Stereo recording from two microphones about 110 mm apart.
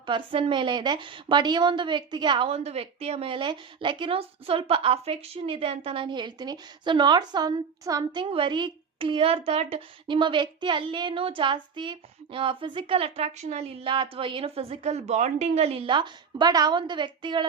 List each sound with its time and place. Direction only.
0.0 s a woman's voice: 50° right (ahead or behind)
2.5 s a woman's voice: 65° right (ahead or behind); by 8.2 s 35° right (ahead or behind)
8.2 s a woman's voice: 50° right (ahead or behind); by 9.8 s 65° right (ahead or behind)
10.1 s a woman's voice: 45° right (ahead or behind)